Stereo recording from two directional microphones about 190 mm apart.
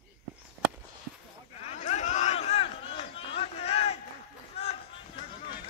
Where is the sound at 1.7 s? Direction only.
35° left (ahead or behind).